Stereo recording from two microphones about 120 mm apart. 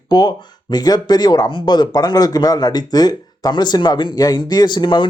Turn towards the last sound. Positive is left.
turn(degrees=40)  # may be behind; listen again after turning